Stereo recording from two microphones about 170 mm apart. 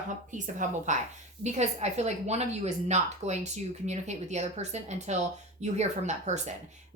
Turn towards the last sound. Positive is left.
turn(degrees=-45)  # may be behind; listen again after turning